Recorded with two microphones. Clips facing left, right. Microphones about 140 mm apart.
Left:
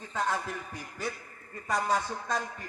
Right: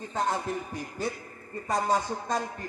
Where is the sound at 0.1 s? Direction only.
25° right (ahead or behind).